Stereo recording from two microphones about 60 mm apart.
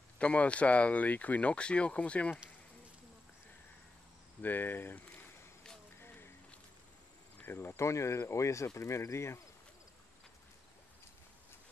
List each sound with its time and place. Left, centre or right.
0.2 s speech: left
4.4 s cricket: left
7.5 s speech: left